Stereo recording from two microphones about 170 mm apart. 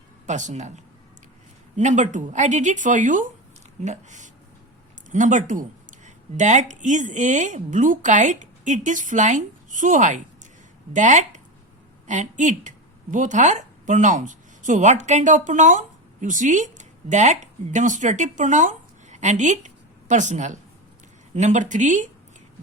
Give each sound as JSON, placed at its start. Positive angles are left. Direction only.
{"t": 0.3, "sound": "a woman's voice", "side_deg": -45}
{"t": 1.7, "sound": "a woman's voice", "side_deg": -45}